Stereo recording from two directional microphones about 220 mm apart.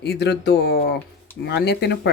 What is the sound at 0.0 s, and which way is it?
Speech, 50° left (ahead or behind).